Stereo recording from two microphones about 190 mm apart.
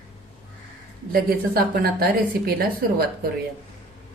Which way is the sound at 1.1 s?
50° right (ahead or behind).